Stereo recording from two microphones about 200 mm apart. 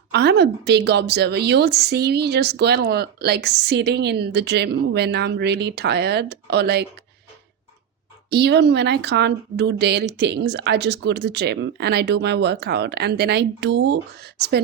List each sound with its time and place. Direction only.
0.1 s a woman's voice: 55° right (ahead or behind)
8.3 s a woman's voice: 55° right (ahead or behind)